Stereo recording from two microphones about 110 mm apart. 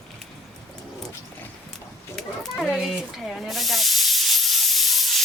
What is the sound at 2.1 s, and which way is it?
Snake, centre (ahead or behind).